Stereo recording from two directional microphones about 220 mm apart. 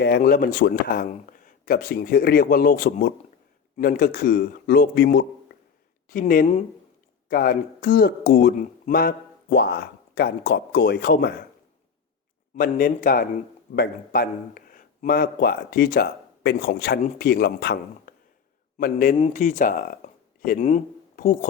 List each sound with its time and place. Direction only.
0.0 s speech: 45° left (ahead or behind)
12.5 s speech: 40° left (ahead or behind)